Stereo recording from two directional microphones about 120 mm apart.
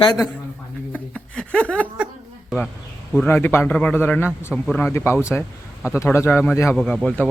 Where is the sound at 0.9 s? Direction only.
10° left (ahead or behind).